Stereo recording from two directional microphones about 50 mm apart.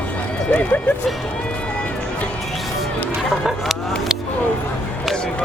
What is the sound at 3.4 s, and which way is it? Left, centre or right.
Vehicle, centre.